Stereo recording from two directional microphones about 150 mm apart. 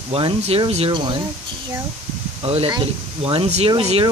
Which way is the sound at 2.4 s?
35° right (ahead or behind).